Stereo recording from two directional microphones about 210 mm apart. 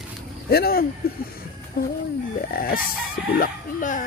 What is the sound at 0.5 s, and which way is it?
Speech, 50° left (ahead or behind).